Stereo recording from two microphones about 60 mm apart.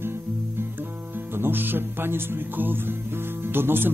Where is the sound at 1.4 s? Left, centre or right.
Right.